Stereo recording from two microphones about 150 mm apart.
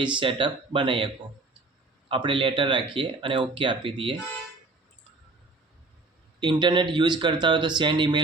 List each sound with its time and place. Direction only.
0.0 s speech: 35° right (ahead or behind)
6.4 s speech: 30° right (ahead or behind)